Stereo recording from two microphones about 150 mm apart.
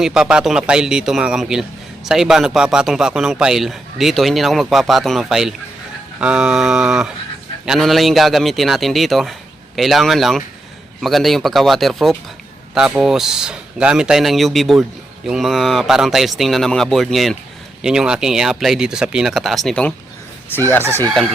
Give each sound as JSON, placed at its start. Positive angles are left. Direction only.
{"t": 0.0, "sound": "a man's voice", "side_deg": -5}
{"t": 20.8, "sound": "speech", "side_deg": -15}